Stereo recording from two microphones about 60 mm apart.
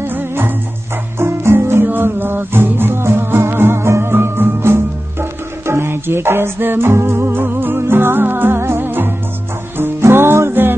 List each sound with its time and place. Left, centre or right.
0.0 s music: right